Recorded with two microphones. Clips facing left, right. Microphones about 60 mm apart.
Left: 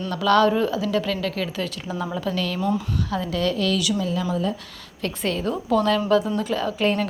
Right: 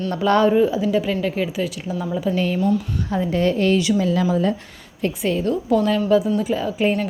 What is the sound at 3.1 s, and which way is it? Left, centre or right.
Speech, right.